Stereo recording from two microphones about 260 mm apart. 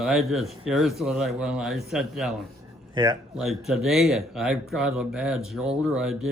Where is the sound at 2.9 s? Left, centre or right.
Centre.